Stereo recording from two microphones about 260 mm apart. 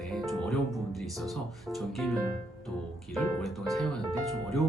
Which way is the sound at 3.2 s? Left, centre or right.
Centre.